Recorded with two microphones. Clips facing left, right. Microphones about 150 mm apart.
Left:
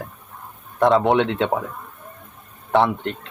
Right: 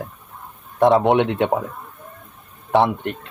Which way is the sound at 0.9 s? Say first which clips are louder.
Right 2 dB; centre (ahead or behind).